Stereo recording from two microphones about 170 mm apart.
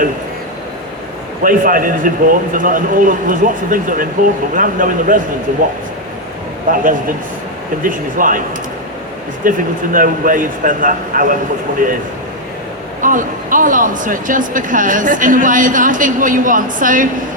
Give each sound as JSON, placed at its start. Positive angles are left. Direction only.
{"t": 1.5, "sound": "speech", "side_deg": -55}
{"t": 6.7, "sound": "speech", "side_deg": -50}
{"t": 13.0, "sound": "speech", "side_deg": -50}